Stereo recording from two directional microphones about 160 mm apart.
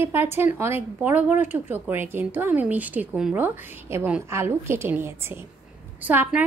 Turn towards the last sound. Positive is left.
turn(degrees=-10)  # may be behind; listen again after turning